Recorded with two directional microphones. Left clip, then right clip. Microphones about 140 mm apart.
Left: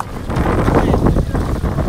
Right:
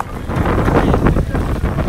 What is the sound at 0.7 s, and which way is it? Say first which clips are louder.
Boat: even; 50° left (ahead or behind).